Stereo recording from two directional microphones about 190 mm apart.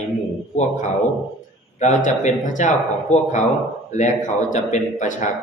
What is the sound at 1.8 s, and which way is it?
Speech, 40° left (ahead or behind).